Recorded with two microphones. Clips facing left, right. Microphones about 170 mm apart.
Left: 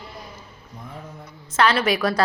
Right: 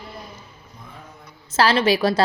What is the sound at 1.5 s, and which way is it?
Speech, 30° right (ahead or behind).